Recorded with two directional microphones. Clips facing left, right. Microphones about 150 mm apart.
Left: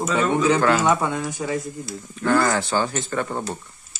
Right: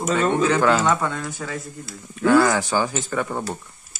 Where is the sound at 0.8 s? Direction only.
15° left (ahead or behind).